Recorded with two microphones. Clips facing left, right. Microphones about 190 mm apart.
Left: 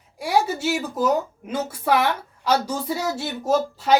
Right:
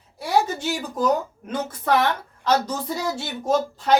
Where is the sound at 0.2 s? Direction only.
10° left (ahead or behind).